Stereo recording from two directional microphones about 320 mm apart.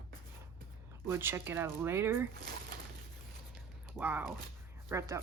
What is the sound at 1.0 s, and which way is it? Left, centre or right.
Speech, centre.